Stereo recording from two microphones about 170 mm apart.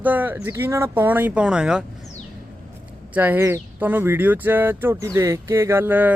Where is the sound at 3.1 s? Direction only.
10° right (ahead or behind).